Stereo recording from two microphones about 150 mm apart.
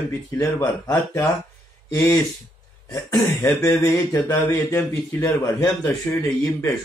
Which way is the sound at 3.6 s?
20° left (ahead or behind).